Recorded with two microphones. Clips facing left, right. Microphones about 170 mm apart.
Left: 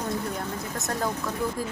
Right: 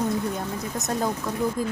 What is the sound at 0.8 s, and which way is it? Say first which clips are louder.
Speech: right 3 dB; 20° right (ahead or behind).